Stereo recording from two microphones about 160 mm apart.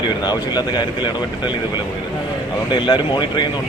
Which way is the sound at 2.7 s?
30° left (ahead or behind).